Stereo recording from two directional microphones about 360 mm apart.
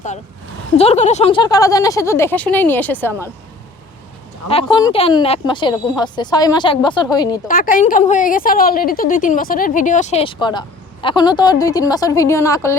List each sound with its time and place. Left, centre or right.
0.8 s speech: centre
4.4 s speech: centre
7.4 s a woman's voice: left